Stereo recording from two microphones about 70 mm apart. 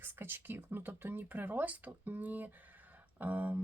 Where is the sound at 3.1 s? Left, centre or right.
Right.